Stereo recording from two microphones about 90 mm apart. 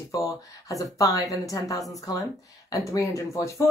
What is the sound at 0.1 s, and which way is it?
Speech, 40° left (ahead or behind).